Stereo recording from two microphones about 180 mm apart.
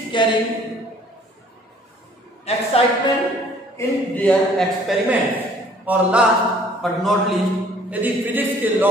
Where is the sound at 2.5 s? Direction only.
35° left (ahead or behind).